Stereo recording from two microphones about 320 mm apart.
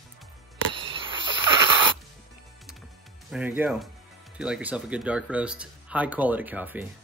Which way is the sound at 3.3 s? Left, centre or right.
Centre.